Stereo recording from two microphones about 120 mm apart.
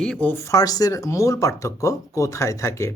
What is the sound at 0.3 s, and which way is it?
Speech, 25° left (ahead or behind).